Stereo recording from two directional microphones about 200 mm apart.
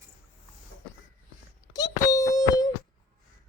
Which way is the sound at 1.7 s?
20° left (ahead or behind).